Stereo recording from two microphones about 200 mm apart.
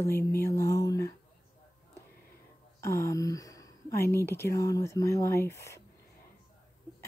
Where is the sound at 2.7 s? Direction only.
15° left (ahead or behind).